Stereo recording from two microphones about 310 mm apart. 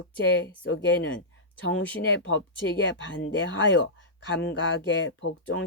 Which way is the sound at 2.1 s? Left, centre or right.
Left.